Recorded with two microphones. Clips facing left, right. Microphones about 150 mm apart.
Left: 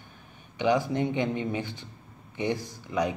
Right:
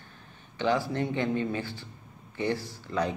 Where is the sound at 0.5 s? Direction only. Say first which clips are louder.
Left 2 dB; 15° left (ahead or behind).